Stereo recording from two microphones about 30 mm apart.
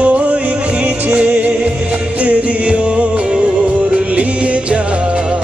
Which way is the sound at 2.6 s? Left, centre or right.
Right.